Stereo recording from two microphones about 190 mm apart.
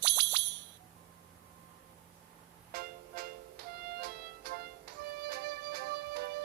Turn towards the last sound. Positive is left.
turn(degrees=-55)  # may be behind; listen again after turning